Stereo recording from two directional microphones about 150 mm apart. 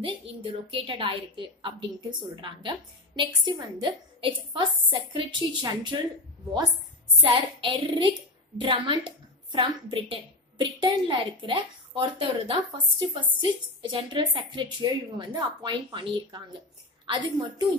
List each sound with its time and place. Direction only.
0.0 s a woman's voice: 35° right (ahead or behind)
7.2 s a woman's voice: 35° right (ahead or behind)